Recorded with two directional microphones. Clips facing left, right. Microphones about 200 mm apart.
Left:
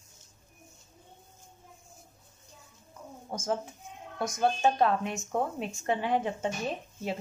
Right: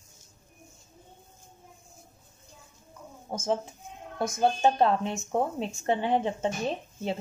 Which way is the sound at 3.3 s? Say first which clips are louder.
Right 3 dB; 25° right (ahead or behind).